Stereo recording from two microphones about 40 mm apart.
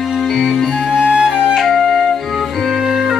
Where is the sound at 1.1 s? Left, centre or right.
Right.